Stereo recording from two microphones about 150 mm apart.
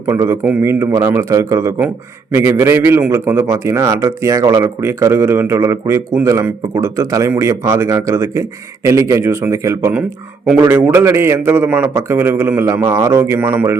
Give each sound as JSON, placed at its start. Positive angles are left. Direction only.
{"t": 0.1, "sound": "a man's voice", "side_deg": -20}